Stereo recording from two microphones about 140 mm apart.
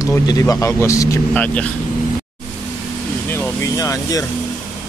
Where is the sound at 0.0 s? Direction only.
25° left (ahead or behind).